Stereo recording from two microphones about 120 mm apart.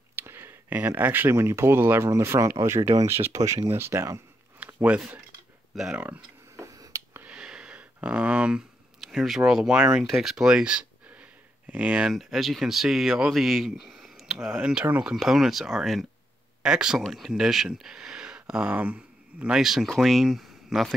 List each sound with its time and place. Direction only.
0.1 s speech: 20° right (ahead or behind)
6.5 s finger snapping: 25° right (ahead or behind)
7.2 s speech: 10° right (ahead or behind)